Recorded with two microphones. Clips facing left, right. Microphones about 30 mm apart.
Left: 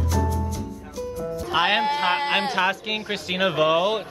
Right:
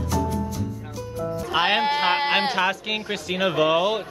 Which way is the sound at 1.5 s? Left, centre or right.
Centre.